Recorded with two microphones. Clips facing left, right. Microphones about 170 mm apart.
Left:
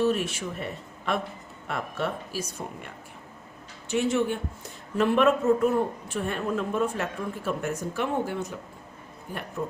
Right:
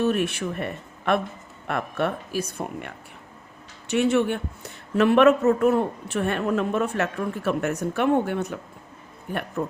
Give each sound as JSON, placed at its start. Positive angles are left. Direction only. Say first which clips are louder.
{"t": 0.0, "sound": "a man's voice", "louder": "right 2 dB", "side_deg": -60}
{"t": 9.6, "sound": "speech", "louder": "right 3 dB", "side_deg": -65}